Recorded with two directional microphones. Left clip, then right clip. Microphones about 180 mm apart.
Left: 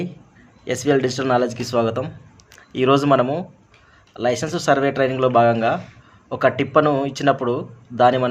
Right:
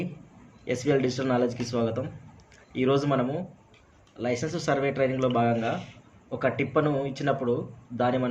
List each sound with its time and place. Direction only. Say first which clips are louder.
0.6 s speech: left 6 dB; 35° left (ahead or behind)